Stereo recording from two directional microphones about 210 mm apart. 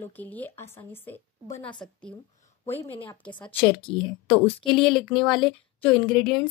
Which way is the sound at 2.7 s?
30° left (ahead or behind).